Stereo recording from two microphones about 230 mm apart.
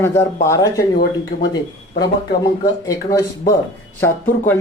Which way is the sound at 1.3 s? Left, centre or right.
Left.